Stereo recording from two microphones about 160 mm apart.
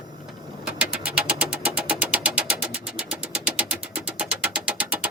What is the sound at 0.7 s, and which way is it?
Vehicle, 5° right (ahead or behind).